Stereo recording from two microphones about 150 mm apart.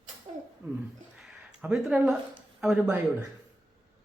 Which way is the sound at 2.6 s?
10° right (ahead or behind).